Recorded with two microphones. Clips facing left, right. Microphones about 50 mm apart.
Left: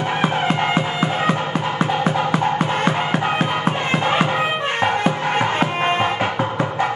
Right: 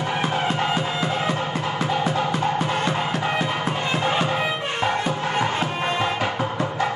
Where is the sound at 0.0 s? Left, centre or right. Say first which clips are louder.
Left 3 dB; left.